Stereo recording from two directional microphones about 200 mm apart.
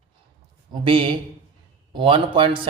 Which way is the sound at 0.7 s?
25° right (ahead or behind).